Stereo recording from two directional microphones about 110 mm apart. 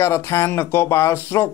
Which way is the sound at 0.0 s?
25° left (ahead or behind).